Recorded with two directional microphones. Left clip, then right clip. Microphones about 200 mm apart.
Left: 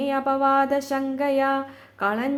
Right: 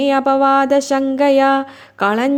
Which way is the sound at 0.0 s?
40° right (ahead or behind).